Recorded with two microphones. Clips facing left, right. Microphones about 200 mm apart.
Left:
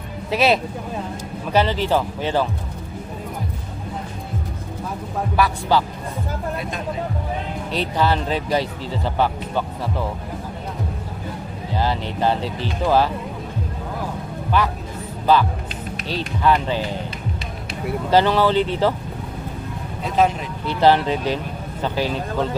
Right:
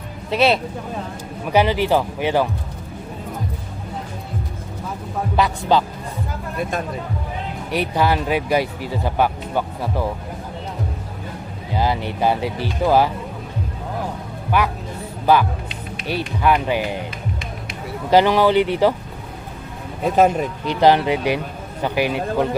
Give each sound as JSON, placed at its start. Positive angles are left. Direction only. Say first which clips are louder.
{"t": 0.3, "sound": "speech", "louder": "right 1 dB", "side_deg": 5}
{"t": 1.5, "sound": "speech", "louder": "right 2 dB", "side_deg": -15}
{"t": 5.4, "sound": "speech", "louder": "right 1 dB", "side_deg": -20}
{"t": 6.6, "sound": "speech", "louder": "right 5 dB", "side_deg": -50}
{"t": 7.7, "sound": "speech", "louder": "right 2 dB", "side_deg": -15}
{"t": 11.7, "sound": "speech", "louder": "right 2 dB", "side_deg": -15}
{"t": 14.5, "sound": "speech", "louder": "right 1 dB", "side_deg": -15}
{"t": 18.1, "sound": "speech", "louder": "right 3 dB", "side_deg": -15}
{"t": 20.1, "sound": "speech", "louder": "right 4 dB", "side_deg": -50}
{"t": 20.7, "sound": "speech", "louder": "right 1 dB", "side_deg": -15}